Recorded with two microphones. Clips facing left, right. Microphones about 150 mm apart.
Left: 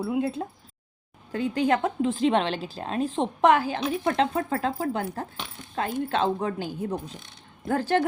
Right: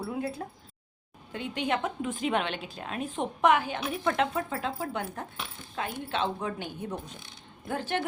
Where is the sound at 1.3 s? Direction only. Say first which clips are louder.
Left 7 dB; 40° left (ahead or behind).